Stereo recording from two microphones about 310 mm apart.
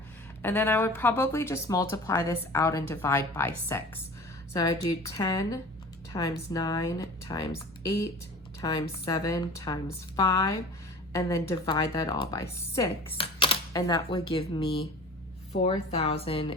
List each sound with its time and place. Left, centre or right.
0.4 s speech: centre
8.6 s speech: centre